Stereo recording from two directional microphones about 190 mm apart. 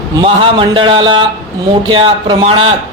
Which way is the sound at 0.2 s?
25° right (ahead or behind).